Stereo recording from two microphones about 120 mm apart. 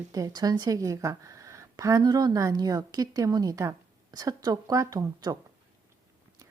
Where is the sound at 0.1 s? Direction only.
30° right (ahead or behind).